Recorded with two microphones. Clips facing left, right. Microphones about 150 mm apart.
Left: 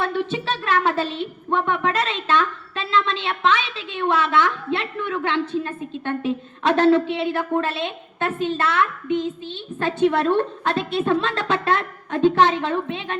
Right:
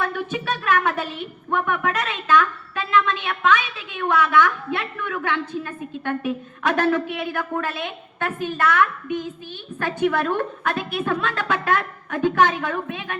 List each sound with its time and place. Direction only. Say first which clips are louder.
0.0 s a woman's voice: left 2 dB; 25° left (ahead or behind)